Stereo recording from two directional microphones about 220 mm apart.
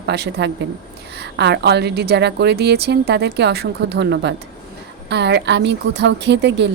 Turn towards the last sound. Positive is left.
turn(degrees=-50)  # may be behind; listen again after turning